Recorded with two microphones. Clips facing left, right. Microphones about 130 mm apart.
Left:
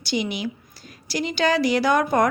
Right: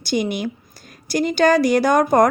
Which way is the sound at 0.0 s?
50° right (ahead or behind).